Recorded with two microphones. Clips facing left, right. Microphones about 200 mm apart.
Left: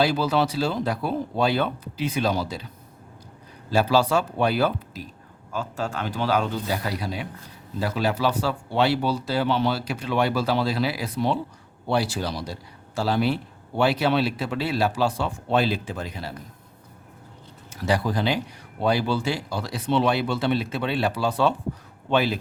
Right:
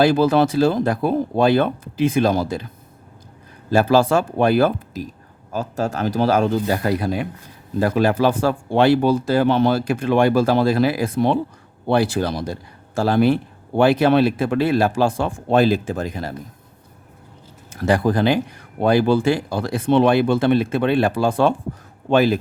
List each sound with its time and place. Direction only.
0.0 s speech: 50° right (ahead or behind)
3.7 s speech: 50° right (ahead or behind)
17.7 s speech: 50° right (ahead or behind)